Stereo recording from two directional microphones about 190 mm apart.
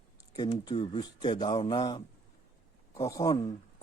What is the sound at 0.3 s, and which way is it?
A man's voice, 25° left (ahead or behind).